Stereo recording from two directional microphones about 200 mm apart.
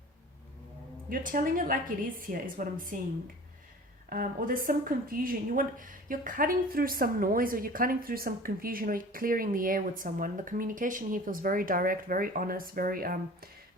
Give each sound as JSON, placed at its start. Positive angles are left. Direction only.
{"t": 1.1, "sound": "a woman's voice", "side_deg": -45}
{"t": 4.1, "sound": "a woman's voice", "side_deg": -45}